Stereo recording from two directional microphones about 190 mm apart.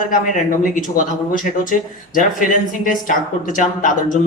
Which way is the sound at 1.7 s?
45° left (ahead or behind).